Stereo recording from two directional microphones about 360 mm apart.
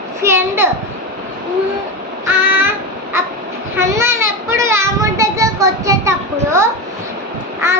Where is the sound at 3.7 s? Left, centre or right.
Centre.